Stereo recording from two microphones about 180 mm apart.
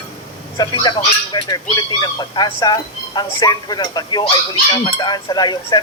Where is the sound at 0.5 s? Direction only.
25° left (ahead or behind).